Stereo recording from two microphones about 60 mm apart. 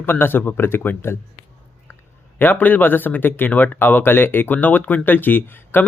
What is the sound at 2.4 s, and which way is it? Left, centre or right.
Speech, left.